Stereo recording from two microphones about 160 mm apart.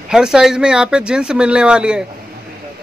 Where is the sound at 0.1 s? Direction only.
5° right (ahead or behind).